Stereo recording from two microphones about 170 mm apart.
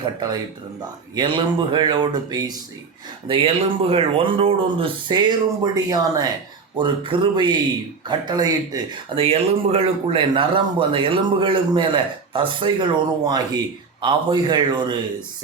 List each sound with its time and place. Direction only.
1.1 s speech: 30° right (ahead or behind)